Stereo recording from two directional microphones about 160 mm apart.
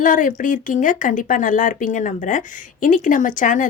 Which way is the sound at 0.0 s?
55° left (ahead or behind).